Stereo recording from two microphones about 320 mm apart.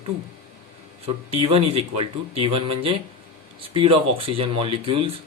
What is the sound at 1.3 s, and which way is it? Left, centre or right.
Speech, centre.